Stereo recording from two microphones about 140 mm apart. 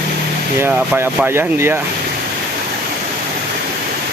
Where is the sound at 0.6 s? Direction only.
15° right (ahead or behind).